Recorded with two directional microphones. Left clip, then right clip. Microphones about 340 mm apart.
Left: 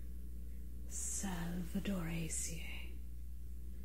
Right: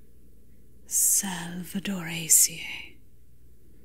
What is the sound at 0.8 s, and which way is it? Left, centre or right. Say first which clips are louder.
Speech: right 18 dB; right.